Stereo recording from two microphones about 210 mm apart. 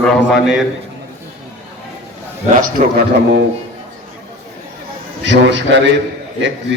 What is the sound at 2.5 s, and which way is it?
Speech, 45° right (ahead or behind).